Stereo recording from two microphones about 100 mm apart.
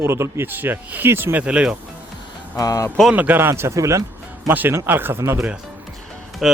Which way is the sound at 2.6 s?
35° left (ahead or behind).